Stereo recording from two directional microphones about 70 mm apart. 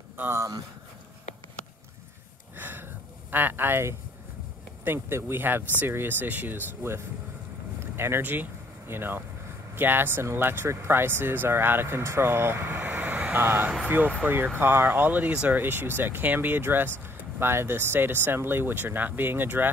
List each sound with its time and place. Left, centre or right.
2.5 s gasp: right
4.8 s speech: right
7.8 s a sound: right
9.8 s speech: right
12.8 s vehicle: centre
13.3 s speech: right